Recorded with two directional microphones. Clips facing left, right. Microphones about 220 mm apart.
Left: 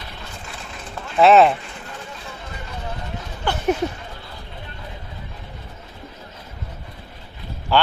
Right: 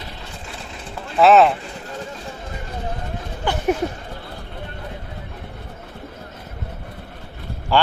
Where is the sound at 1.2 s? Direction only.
Centre (ahead or behind).